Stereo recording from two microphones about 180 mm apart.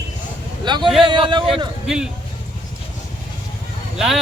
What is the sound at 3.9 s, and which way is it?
Speech, centre (ahead or behind).